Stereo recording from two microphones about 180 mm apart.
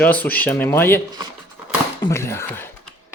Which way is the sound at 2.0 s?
15° left (ahead or behind).